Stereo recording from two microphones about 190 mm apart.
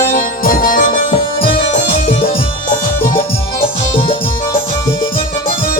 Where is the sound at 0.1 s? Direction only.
50° left (ahead or behind).